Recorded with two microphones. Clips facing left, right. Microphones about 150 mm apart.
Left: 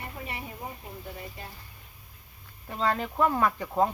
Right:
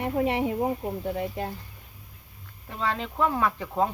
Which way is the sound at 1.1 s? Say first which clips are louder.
Right 12 dB; 80° right.